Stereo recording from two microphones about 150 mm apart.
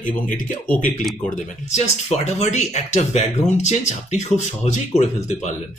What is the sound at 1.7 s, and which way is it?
Speech, 50° left (ahead or behind).